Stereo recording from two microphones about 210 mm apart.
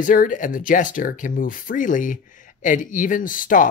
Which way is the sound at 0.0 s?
40° left (ahead or behind).